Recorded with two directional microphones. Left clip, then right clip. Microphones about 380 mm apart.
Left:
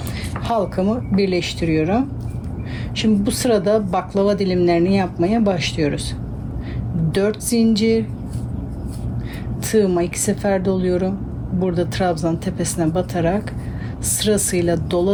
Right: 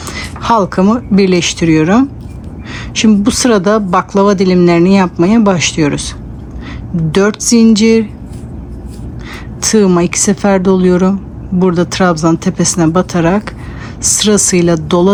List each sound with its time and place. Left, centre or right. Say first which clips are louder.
0.1 s a sound: right 10 dB; centre
0.6 s speech: right 9 dB; right
7.1 s speech: right 9 dB; centre
9.6 s speech: right 7 dB; centre